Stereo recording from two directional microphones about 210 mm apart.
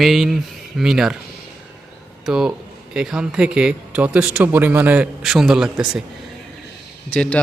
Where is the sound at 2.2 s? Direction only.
5° right (ahead or behind).